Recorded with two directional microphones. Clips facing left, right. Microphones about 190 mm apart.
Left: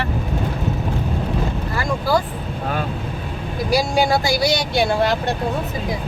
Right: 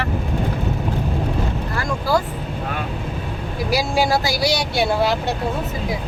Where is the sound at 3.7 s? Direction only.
5° right (ahead or behind).